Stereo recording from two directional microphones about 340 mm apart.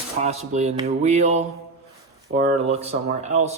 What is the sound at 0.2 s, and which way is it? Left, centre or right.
Speech, centre.